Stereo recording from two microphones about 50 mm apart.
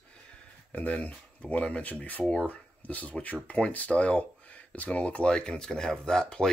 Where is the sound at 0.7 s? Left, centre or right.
Left.